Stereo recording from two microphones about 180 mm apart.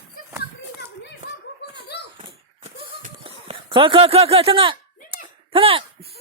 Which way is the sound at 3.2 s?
30° right (ahead or behind).